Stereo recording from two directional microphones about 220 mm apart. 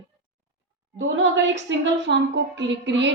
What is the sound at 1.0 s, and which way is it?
A woman's voice, 60° right (ahead or behind).